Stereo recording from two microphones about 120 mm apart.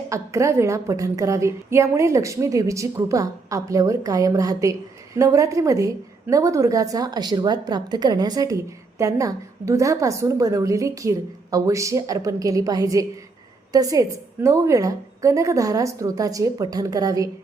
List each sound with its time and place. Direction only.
0.1 s a woman's voice: 25° right (ahead or behind)